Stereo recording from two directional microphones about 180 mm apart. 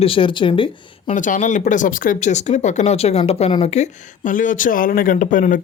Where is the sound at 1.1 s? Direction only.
45° left (ahead or behind).